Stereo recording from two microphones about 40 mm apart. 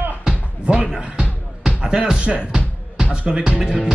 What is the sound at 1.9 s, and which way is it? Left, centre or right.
Music, right.